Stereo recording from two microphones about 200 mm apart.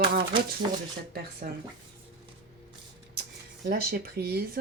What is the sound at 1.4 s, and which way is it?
Speech, 45° right (ahead or behind).